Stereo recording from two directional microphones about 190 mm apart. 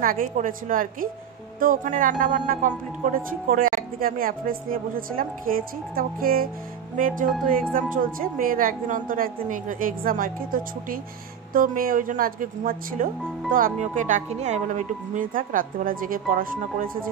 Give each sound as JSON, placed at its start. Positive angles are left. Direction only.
{"t": 0.0, "sound": "speech", "side_deg": -45}
{"t": 7.7, "sound": "speech", "side_deg": -45}